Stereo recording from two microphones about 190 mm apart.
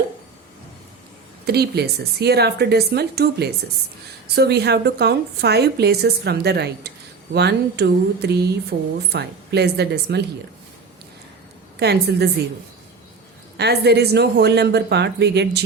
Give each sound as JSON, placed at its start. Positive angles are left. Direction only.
{"t": 1.5, "sound": "a woman's voice", "side_deg": -60}
{"t": 8.7, "sound": "a woman's voice", "side_deg": -50}
{"t": 9.1, "sound": "a woman's voice", "side_deg": -60}
{"t": 11.8, "sound": "a woman's voice", "side_deg": -60}
{"t": 13.6, "sound": "a woman's voice", "side_deg": -60}